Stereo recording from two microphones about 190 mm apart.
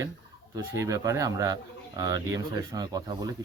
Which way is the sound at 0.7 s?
15° right (ahead or behind).